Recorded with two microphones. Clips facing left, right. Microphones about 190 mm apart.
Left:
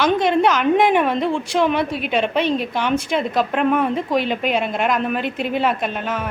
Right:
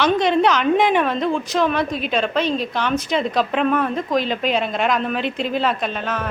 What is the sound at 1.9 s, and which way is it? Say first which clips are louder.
Speech: even; 65° left (ahead or behind).